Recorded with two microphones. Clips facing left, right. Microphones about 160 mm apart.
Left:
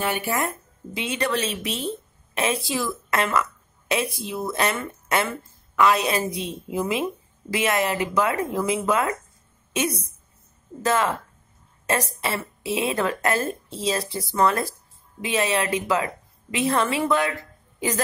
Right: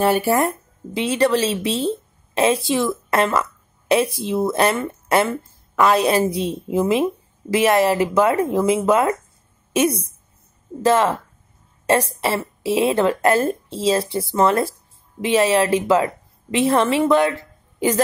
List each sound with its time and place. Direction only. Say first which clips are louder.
0.0 s a woman's voice: right 8 dB; 40° right (ahead or behind)